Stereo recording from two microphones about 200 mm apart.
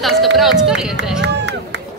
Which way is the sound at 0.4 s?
Centre (ahead or behind).